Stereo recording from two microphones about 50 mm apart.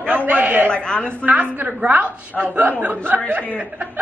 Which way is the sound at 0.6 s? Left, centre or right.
Centre.